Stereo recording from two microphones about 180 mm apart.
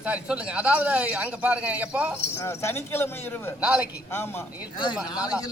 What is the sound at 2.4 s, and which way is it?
Speech, 15° left (ahead or behind).